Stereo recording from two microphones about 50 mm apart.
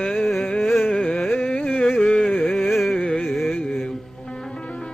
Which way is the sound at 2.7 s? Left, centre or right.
Centre.